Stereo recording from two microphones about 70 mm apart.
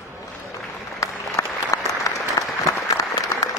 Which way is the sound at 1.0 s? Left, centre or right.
Left.